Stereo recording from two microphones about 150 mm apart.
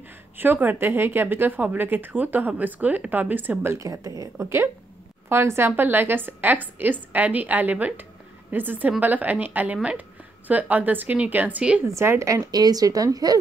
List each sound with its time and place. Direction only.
0.4 s a woman's voice: 15° right (ahead or behind)